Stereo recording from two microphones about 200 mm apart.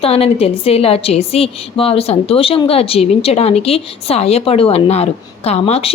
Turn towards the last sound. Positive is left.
turn(degrees=30)  # may be behind; listen again after turning